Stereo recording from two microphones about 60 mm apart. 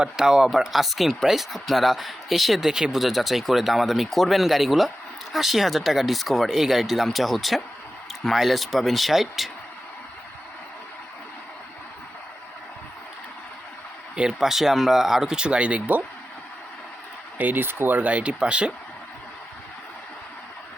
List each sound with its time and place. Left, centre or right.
0.0 s speech: centre
14.3 s speech: centre; by 16.0 s right
17.3 s speech: right